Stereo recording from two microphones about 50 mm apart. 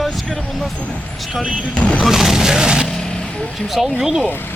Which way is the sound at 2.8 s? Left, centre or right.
Centre.